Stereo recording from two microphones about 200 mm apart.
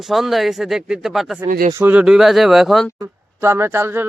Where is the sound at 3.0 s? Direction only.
15° right (ahead or behind).